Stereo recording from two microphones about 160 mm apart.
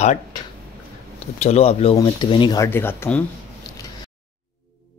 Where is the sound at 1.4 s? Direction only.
40° left (ahead or behind).